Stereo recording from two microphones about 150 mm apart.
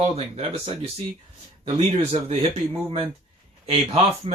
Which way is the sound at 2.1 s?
45° right (ahead or behind).